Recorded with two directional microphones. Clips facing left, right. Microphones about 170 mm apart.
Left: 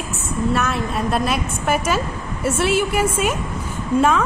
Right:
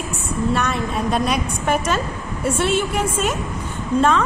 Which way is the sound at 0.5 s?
Centre (ahead or behind).